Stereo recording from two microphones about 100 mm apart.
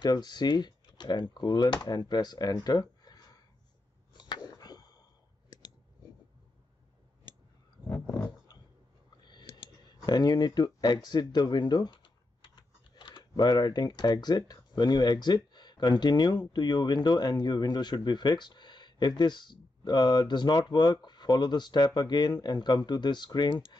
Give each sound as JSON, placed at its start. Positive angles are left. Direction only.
{"t": 0.0, "sound": "speech", "side_deg": 45}
{"t": 4.1, "sound": "a sound", "side_deg": 50}
{"t": 9.2, "sound": "clicking", "side_deg": 45}
{"t": 10.0, "sound": "speech", "side_deg": 45}
{"t": 11.1, "sound": "typing", "side_deg": 45}
{"t": 13.3, "sound": "speech", "side_deg": 45}